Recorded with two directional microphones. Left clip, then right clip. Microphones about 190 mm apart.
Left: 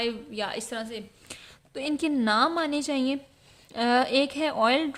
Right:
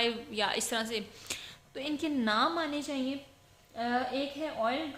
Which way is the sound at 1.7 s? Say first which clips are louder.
Left 6 dB; 30° left (ahead or behind).